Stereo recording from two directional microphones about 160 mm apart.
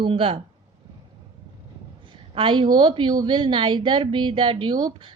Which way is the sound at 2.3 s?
35° right (ahead or behind).